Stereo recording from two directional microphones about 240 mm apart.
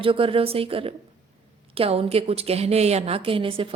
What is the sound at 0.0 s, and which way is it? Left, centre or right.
A woman's voice, right.